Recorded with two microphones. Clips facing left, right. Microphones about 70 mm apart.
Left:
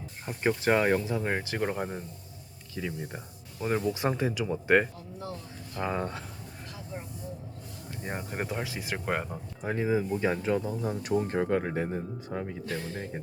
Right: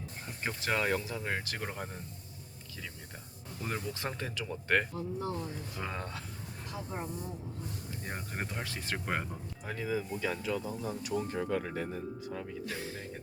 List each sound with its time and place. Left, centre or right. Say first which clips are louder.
0.3 s speech: left 9 dB; left
2.8 s speech: left 11 dB; left
3.6 s speech: left 9 dB; centre
8.0 s speech: left 6 dB; centre
9.3 s speech: left 7 dB; left
10.8 s speech: left 6 dB; left
12.6 s speech: left 4 dB; centre